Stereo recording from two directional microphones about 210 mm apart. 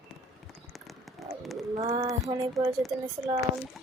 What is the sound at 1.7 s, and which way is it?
Speech, 30° right (ahead or behind).